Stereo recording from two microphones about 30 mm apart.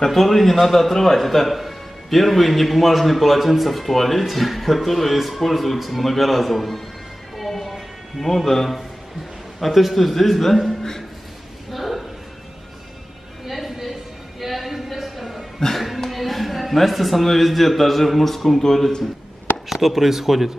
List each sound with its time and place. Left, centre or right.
0.1 s a man's voice: centre
7.3 s music: centre
8.2 s a man's voice: centre
11.7 s a sound: centre
13.5 s a sound: centre
16.1 s a man's voice: centre
19.7 s speech: centre